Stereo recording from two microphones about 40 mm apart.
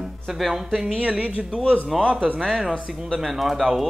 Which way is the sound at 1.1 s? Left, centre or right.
Right.